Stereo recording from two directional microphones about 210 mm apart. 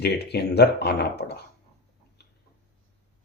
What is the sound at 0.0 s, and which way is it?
Speech, 50° left (ahead or behind).